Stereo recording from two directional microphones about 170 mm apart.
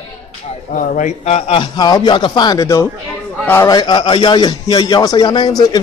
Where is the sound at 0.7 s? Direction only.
50° left (ahead or behind).